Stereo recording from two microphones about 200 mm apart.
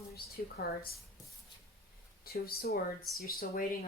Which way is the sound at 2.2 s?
50° left (ahead or behind).